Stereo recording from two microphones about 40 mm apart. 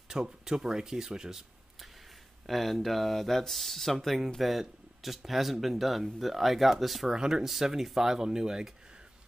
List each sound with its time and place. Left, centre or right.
0.1 s speech: centre
2.4 s speech: centre
7.1 s speech: centre